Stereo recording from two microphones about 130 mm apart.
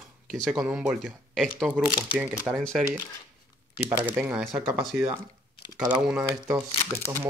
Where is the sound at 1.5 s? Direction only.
5° left (ahead or behind).